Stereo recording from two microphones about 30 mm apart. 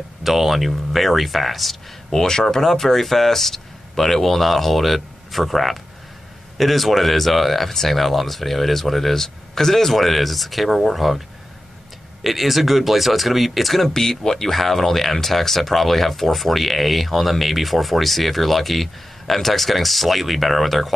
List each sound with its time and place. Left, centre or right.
0.2 s speech: centre
2.0 s speech: centre
2.6 s speech: centre
13.9 s speech: centre
14.5 s speech: centre